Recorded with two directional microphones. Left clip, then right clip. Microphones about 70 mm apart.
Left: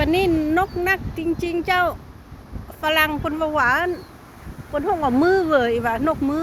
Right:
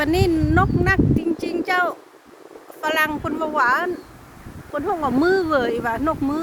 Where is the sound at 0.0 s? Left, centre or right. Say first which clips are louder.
Left 1 dB; right.